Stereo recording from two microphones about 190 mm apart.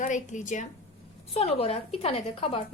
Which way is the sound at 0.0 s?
40° left (ahead or behind).